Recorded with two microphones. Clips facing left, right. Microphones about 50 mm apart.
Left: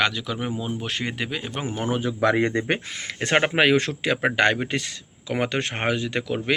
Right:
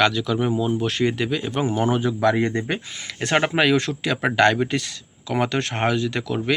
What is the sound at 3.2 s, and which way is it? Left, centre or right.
Speech, left.